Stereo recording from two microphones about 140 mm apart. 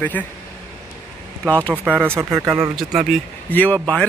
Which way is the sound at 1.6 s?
10° left (ahead or behind).